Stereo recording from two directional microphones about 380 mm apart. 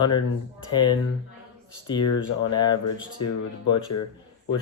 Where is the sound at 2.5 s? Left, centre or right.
Centre.